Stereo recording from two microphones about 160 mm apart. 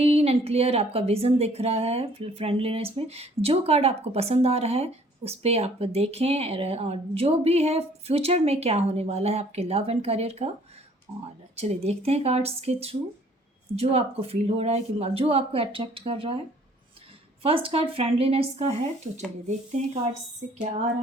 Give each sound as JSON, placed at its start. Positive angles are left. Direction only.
{"t": 0.0, "sound": "speech", "side_deg": -40}
{"t": 11.5, "sound": "speech", "side_deg": -40}
{"t": 17.4, "sound": "speech", "side_deg": -35}